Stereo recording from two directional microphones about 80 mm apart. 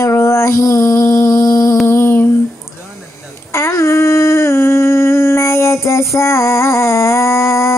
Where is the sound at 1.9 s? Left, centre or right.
Left.